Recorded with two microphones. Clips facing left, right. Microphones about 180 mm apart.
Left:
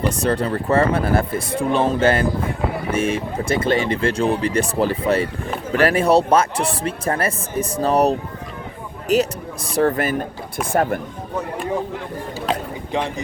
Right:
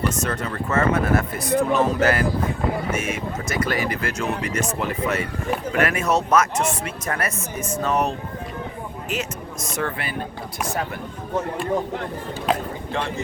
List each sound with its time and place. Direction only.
0.1 s speech: 35° left (ahead or behind); by 11.0 s 50° left (ahead or behind)
12.9 s speech: 15° left (ahead or behind)